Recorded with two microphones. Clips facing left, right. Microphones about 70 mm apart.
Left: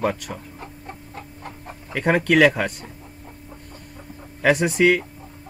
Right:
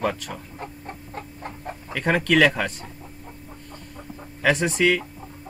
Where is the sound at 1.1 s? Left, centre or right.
Right.